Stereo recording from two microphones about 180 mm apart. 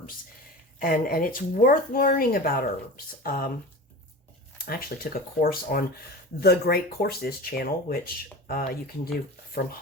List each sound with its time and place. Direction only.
0.8 s speech: 55° left (ahead or behind)
4.5 s speech: 55° left (ahead or behind)